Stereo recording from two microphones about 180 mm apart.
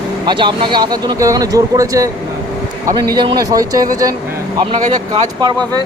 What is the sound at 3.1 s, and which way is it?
Speech, 25° right (ahead or behind).